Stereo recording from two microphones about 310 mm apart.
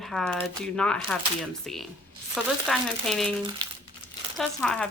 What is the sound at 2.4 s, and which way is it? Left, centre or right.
Speech, centre.